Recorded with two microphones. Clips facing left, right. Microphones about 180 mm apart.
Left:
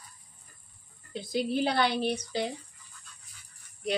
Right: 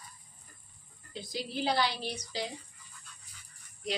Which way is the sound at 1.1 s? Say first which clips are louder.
Left 9 dB; 55° left (ahead or behind).